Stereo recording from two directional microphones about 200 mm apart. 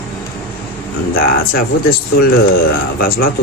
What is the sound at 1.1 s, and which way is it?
Speech, 45° left (ahead or behind).